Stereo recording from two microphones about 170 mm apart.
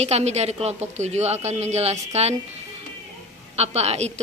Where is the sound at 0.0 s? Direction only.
40° right (ahead or behind).